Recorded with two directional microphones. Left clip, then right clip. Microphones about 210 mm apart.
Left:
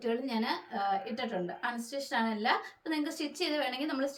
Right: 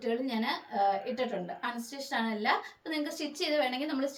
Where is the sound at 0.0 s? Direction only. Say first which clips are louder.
Right 1 dB; 15° left (ahead or behind).